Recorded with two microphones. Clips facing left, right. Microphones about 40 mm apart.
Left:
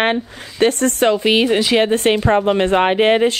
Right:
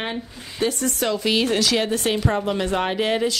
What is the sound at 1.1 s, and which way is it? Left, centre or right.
Speech, left.